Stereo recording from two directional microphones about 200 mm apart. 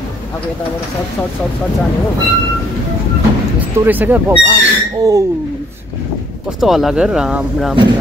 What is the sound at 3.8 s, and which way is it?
Speech, 10° right (ahead or behind).